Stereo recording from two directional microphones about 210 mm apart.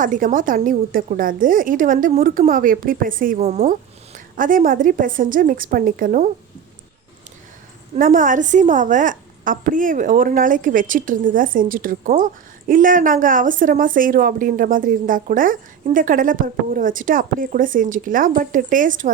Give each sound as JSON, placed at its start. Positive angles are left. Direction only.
{"t": 0.0, "sound": "a woman's voice", "side_deg": -40}
{"t": 7.9, "sound": "a woman's voice", "side_deg": -40}